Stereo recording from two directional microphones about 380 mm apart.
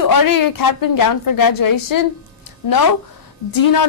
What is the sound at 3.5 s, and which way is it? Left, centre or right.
Speech, left.